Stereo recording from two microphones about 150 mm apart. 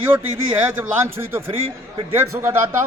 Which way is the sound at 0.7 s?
15° right (ahead or behind).